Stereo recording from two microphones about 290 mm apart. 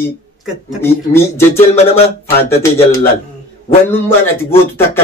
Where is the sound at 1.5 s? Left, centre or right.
Left.